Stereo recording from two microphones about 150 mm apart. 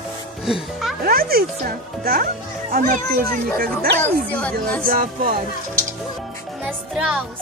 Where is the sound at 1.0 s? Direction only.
85° right.